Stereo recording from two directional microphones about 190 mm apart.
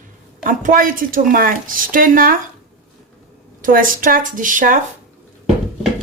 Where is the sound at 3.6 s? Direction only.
45° right (ahead or behind).